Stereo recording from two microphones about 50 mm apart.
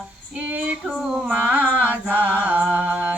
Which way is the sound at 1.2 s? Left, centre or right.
Right.